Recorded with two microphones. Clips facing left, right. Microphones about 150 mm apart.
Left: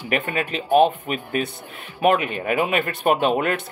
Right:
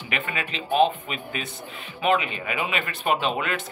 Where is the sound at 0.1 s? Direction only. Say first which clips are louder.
Left 7 dB; 45° left (ahead or behind).